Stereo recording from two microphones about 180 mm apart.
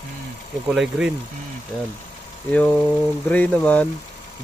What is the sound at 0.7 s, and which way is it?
Speech, 5° right (ahead or behind).